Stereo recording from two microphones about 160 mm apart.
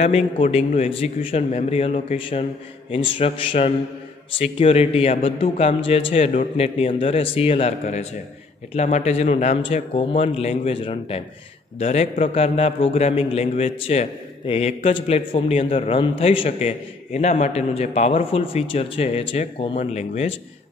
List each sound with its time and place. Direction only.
0.0 s a man's voice: 40° left (ahead or behind)